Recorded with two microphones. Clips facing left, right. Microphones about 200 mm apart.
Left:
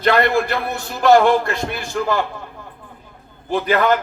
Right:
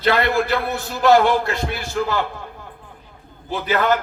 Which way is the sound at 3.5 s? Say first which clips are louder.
Left 6 dB; 50° left (ahead or behind).